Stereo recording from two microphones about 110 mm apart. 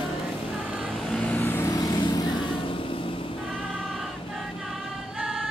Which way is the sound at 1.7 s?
35° left (ahead or behind).